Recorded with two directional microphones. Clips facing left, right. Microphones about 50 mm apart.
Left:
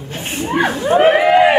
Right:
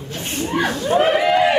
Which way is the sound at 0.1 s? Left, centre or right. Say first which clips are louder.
Left 3 dB; left.